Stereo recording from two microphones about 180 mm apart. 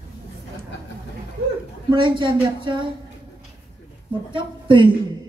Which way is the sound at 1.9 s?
25° right (ahead or behind).